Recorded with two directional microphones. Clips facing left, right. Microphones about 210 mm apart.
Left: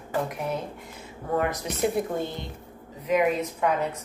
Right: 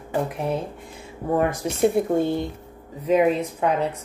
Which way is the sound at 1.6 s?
45° right (ahead or behind).